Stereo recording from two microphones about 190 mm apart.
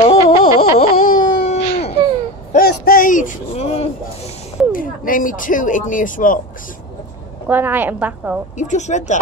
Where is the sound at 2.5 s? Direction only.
55° left (ahead or behind).